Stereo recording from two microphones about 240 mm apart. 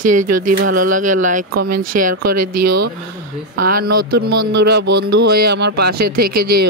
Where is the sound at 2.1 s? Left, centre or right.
Right.